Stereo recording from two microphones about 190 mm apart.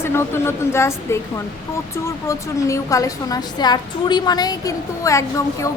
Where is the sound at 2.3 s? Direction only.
15° left (ahead or behind).